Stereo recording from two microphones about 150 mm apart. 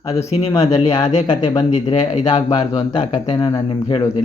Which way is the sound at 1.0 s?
50° left (ahead or behind).